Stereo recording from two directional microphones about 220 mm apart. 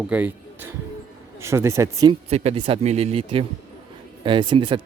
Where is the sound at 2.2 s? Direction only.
30° right (ahead or behind).